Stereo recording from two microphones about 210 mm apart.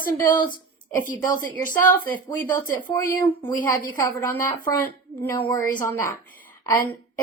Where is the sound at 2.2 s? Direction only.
20° left (ahead or behind).